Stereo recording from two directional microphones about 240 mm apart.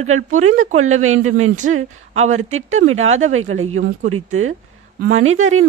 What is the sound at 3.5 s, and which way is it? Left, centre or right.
A woman's voice, right.